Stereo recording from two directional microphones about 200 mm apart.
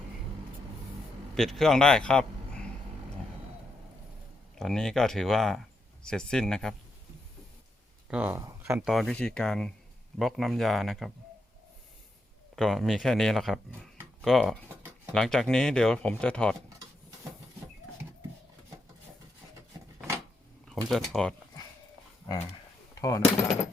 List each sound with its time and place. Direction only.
1.4 s speech: centre (ahead or behind)
4.5 s speech: 5° left (ahead or behind)
8.1 s speech: 10° right (ahead or behind)
8.7 s speech: centre (ahead or behind)
12.5 s speech: centre (ahead or behind)
20.7 s speech: centre (ahead or behind)
23.0 s speech: 15° left (ahead or behind)